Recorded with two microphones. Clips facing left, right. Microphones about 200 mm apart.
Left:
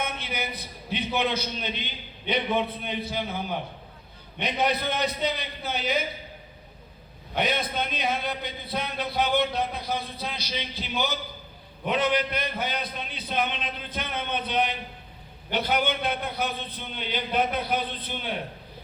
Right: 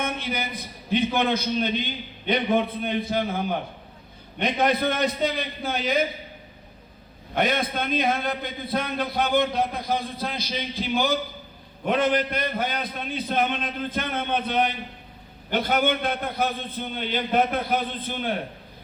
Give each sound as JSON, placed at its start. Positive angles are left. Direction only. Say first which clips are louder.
{"t": 0.0, "sound": "a sound", "louder": "right 4 dB", "side_deg": -50}
{"t": 0.9, "sound": "a man's voice", "louder": "right 5 dB", "side_deg": -50}
{"t": 7.3, "sound": "a man's voice", "louder": "right 3 dB", "side_deg": -50}